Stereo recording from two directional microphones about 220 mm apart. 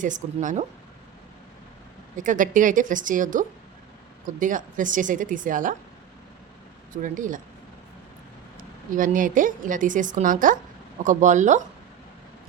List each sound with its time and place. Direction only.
0.0 s a woman's voice: 35° right (ahead or behind)
2.1 s a woman's voice: 35° right (ahead or behind)
6.9 s a woman's voice: 35° right (ahead or behind)
8.5 s a woman's voice: 40° right (ahead or behind)